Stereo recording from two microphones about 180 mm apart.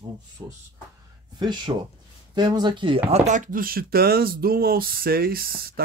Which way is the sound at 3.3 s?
45° right (ahead or behind).